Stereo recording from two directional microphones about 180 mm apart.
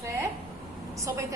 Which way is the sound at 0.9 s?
15° right (ahead or behind).